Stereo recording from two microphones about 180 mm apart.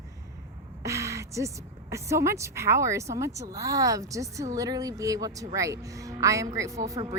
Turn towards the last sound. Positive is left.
turn(degrees=-20)  # may be behind; listen again after turning